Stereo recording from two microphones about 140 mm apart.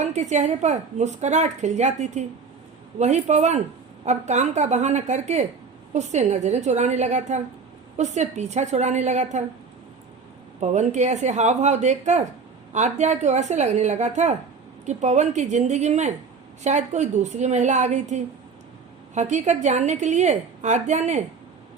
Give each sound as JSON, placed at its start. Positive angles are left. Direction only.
{"t": 0.0, "sound": "a woman's voice", "side_deg": -55}
{"t": 10.6, "sound": "a woman's voice", "side_deg": -55}